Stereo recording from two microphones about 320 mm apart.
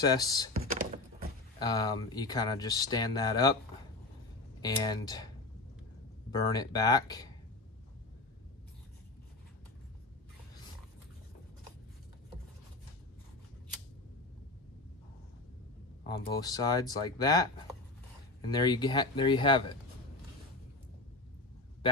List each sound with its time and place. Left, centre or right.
0.0 s speech: centre
0.5 s thunk: right
1.6 s speech: centre
4.6 s speech: centre
6.3 s speech: centre
16.1 s speech: centre
18.5 s speech: centre